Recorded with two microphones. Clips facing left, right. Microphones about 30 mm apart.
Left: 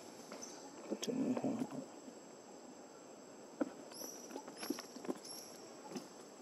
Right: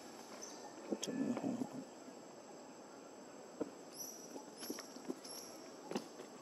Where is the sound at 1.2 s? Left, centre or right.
Centre.